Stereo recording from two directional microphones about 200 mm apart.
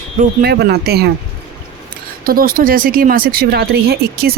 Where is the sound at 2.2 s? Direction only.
45° right (ahead or behind).